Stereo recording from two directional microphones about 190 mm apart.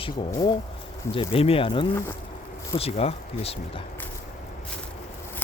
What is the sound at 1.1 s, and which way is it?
Speech, 30° left (ahead or behind).